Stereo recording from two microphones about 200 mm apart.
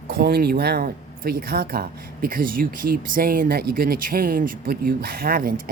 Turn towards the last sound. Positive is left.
turn(degrees=-45)  # may be behind; listen again after turning